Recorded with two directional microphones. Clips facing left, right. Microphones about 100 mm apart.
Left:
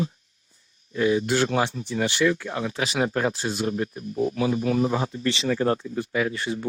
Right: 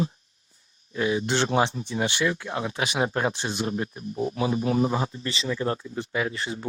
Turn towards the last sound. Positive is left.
turn(degrees=-30)  # may be behind; listen again after turning